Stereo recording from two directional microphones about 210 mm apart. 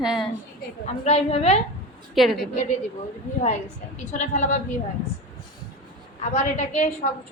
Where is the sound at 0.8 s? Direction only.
30° left (ahead or behind).